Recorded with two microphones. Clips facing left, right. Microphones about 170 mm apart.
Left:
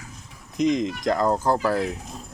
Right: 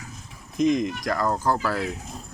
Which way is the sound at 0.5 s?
20° left (ahead or behind).